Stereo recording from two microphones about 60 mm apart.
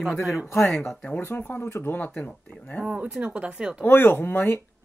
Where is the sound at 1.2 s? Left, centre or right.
Left.